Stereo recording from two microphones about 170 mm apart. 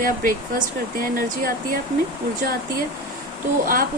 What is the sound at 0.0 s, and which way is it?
Speech, 55° right (ahead or behind).